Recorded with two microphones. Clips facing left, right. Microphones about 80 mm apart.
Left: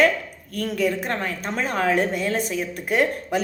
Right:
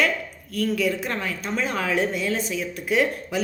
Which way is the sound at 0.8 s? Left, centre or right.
Left.